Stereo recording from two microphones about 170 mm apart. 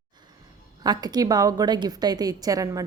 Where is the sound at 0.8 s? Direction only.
25° right (ahead or behind).